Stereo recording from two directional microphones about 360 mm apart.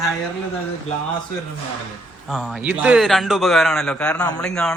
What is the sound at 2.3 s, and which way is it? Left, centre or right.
A man's voice, centre.